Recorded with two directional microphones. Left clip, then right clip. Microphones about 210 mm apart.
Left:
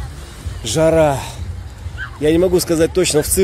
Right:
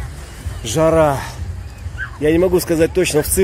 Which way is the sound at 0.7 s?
15° left (ahead or behind).